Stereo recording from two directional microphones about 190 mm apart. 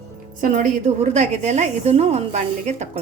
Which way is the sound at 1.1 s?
35° right (ahead or behind).